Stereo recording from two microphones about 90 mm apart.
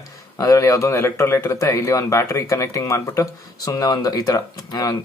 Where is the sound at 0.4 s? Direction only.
40° left (ahead or behind).